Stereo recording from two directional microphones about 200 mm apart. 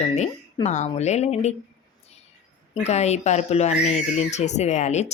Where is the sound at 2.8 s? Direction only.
35° left (ahead or behind).